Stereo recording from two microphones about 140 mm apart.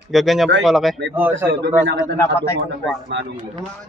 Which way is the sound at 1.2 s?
15° right (ahead or behind).